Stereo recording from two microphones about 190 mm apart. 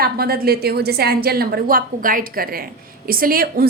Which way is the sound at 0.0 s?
55° right (ahead or behind).